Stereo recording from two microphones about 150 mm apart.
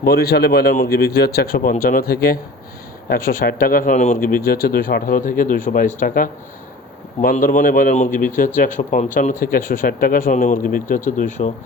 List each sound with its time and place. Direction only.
0.0 s speech: 90° left
3.1 s a man's voice: 70° left (ahead or behind); by 11.5 s 55° left (ahead or behind)